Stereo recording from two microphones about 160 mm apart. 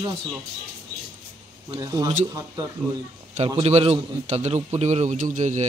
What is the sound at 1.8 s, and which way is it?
Speech, 20° right (ahead or behind).